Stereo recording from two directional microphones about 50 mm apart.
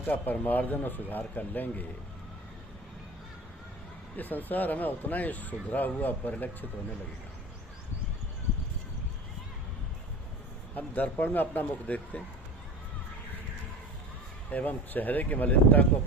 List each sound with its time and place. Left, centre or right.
0.1 s speech: left
4.2 s speech: left
10.8 s speech: left
14.5 s speech: left